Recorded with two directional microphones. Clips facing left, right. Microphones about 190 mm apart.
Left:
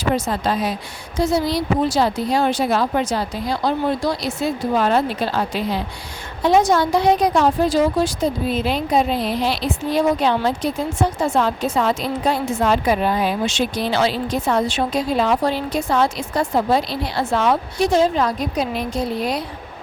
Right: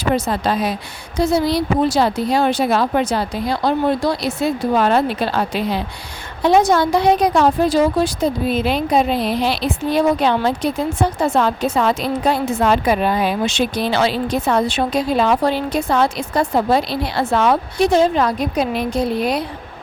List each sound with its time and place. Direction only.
1.2 s speech: 65° right (ahead or behind)